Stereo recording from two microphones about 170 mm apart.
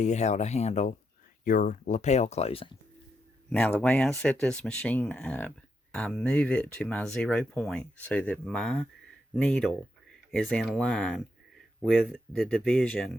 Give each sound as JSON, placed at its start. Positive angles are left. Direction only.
{"t": 0.0, "sound": "speech", "side_deg": 45}
{"t": 3.5, "sound": "speech", "side_deg": 10}